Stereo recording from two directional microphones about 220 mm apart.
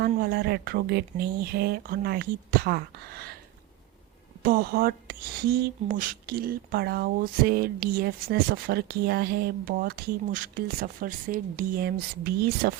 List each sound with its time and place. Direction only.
0.1 s speech: 45° right (ahead or behind)
4.4 s speech: 45° right (ahead or behind)